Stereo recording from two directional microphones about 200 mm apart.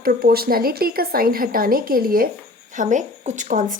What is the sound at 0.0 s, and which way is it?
A woman's voice, 50° right (ahead or behind).